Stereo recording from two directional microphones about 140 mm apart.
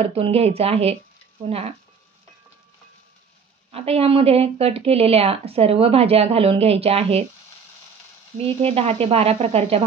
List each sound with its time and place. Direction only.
0.0 s speech: 45° right (ahead or behind)
3.7 s speech: 45° right (ahead or behind)
8.4 s speech: 45° right (ahead or behind)